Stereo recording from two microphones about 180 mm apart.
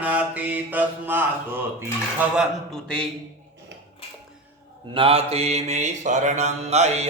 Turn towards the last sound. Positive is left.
turn(degrees=-35)  # may be behind; listen again after turning